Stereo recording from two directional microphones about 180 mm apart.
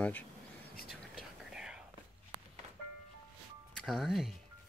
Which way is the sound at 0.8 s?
5° right (ahead or behind).